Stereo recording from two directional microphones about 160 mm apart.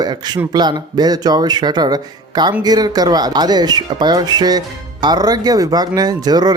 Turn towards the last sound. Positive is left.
turn(degrees=-25)  # may be behind; listen again after turning